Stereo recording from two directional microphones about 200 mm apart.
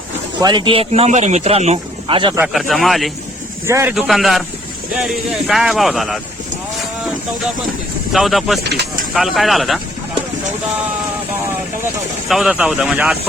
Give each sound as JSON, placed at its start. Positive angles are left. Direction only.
{"t": 0.3, "sound": "speech", "side_deg": -20}
{"t": 2.5, "sound": "speech", "side_deg": 0}
{"t": 3.7, "sound": "speech", "side_deg": -15}
{"t": 3.9, "sound": "speech", "side_deg": 0}
{"t": 8.1, "sound": "speech", "side_deg": 0}
{"t": 8.6, "sound": "speech", "side_deg": -60}
{"t": 9.1, "sound": "speech", "side_deg": 0}
{"t": 12.3, "sound": "speech", "side_deg": -5}